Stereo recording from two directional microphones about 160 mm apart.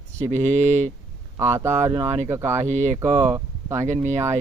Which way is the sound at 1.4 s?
15° right (ahead or behind).